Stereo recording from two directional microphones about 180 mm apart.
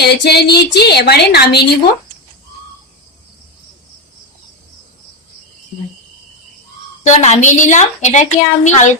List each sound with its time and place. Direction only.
0.0 s a woman's voice: 65° left (ahead or behind)
7.1 s a woman's voice: 40° left (ahead or behind)